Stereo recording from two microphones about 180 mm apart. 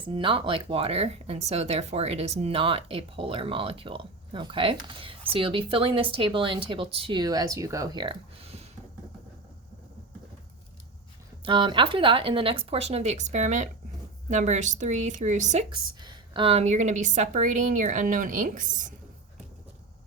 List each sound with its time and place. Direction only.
0.0 s speech: 30° right (ahead or behind)
11.4 s speech: 25° right (ahead or behind)
15.7 s a woman's voice: 25° right (ahead or behind); by 18.9 s 45° right (ahead or behind)